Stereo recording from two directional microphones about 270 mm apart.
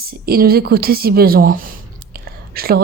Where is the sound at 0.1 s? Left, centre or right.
Right.